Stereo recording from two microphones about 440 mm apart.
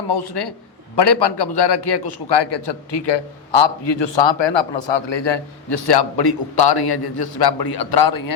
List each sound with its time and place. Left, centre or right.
0.1 s a man's voice: left